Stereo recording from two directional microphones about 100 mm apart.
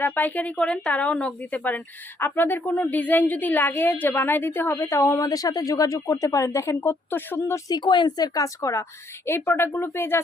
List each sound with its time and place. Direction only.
0.0 s speech: 20° left (ahead or behind)
7.7 s speech: 50° left (ahead or behind); by 10.2 s 25° left (ahead or behind)